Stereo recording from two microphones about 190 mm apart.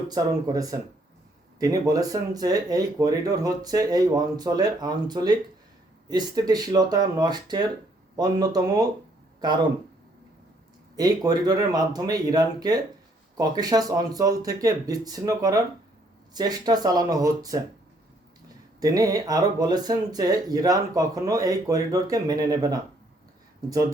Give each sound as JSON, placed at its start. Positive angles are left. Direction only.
{"t": 0.1, "sound": "speech", "side_deg": -20}
{"t": 10.9, "sound": "speech", "side_deg": -20}
{"t": 18.8, "sound": "speech", "side_deg": -20}